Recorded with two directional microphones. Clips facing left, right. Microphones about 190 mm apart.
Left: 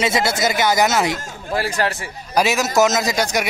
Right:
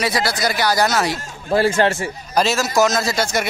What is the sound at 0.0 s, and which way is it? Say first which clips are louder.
Speech: left 2 dB; 25° left (ahead or behind).